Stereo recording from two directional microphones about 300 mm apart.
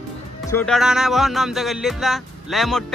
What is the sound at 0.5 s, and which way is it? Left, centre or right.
Music, centre.